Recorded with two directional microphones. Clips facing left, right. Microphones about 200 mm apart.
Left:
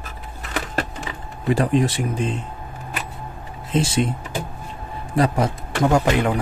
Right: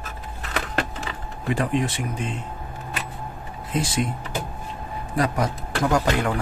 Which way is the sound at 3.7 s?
30° left (ahead or behind).